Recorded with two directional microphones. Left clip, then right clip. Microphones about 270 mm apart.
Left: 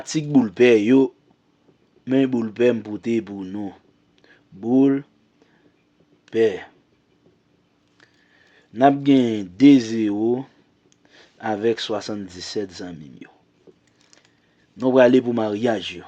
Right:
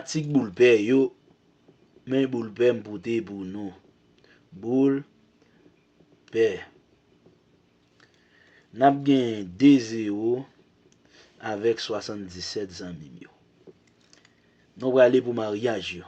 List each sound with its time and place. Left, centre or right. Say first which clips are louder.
0.0 s a man's voice: left 6 dB; left
4.2 s a sound: left 5 dB; left
6.2 s speech: left 4 dB; left
8.7 s speech: left 4 dB; left
14.8 s a man's voice: left 4 dB; left